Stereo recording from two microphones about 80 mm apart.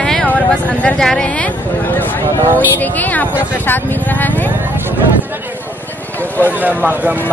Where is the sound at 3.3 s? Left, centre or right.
Centre.